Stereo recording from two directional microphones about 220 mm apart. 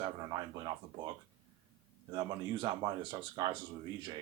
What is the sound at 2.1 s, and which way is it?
Speech, 20° right (ahead or behind).